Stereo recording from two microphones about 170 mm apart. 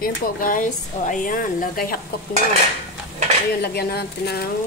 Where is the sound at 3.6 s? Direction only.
70° left (ahead or behind).